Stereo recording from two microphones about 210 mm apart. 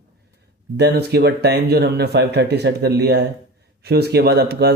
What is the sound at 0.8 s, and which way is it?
Speech, 50° right (ahead or behind).